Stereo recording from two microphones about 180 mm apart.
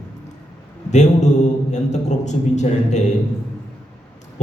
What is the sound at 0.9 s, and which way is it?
A man's voice, 40° left (ahead or behind).